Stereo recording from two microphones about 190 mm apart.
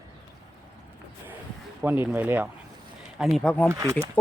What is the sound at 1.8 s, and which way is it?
Speech, 10° right (ahead or behind).